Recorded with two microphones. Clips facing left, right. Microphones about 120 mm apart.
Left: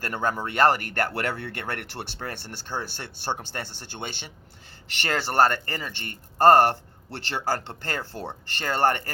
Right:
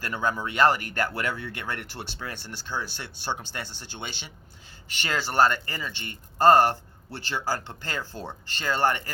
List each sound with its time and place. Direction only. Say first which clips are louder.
0.0 s a man's voice: left 1 dB; 50° left (ahead or behind)